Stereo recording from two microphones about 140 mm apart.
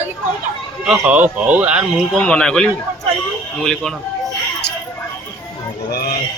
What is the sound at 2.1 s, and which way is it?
Speech, 10° left (ahead or behind).